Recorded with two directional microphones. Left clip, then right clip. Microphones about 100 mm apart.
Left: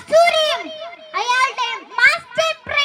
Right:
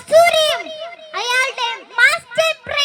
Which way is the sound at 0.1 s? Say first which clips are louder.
Right 2 dB; 35° right (ahead or behind).